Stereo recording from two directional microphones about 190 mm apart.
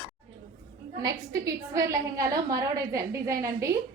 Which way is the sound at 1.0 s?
15° right (ahead or behind).